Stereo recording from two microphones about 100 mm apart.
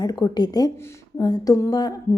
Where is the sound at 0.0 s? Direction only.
40° left (ahead or behind).